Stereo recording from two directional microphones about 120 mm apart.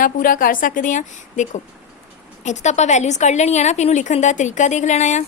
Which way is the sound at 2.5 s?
75° left (ahead or behind).